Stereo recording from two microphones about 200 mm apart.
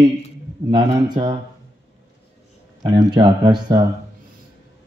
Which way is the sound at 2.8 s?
20° right (ahead or behind).